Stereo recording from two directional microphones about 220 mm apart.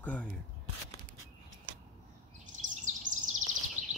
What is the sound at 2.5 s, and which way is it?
Bird vocalization, 35° right (ahead or behind).